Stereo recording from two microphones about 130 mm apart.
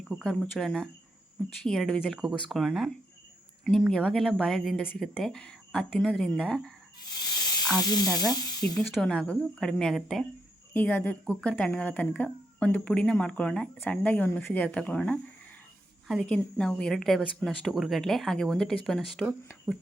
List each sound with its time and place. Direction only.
0.2 s speech: 5° left (ahead or behind)
7.8 s speech: 30° left (ahead or behind)
8.7 s speech: 5° left (ahead or behind)
10.8 s speech: 10° left (ahead or behind)